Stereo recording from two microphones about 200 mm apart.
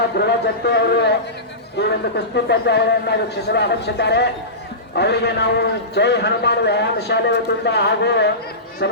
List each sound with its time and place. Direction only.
0.2 s a man's voice: 55° left (ahead or behind)